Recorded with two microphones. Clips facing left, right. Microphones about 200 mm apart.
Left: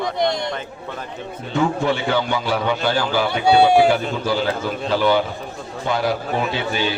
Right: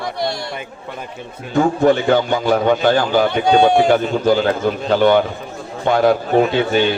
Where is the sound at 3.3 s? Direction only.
10° left (ahead or behind).